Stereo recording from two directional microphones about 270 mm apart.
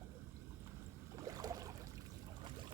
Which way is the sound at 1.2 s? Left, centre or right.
Centre.